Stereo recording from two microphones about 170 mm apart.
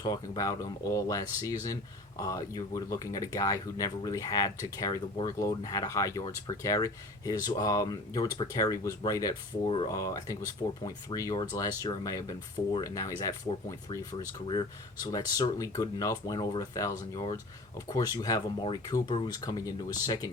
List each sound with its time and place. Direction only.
0.0 s speech: 20° left (ahead or behind)